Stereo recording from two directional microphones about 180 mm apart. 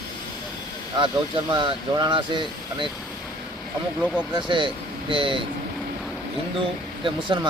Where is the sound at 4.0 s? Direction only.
10° left (ahead or behind).